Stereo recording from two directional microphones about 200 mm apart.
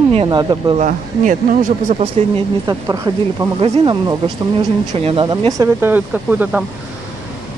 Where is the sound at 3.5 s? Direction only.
25° right (ahead or behind); by 6.6 s 10° right (ahead or behind).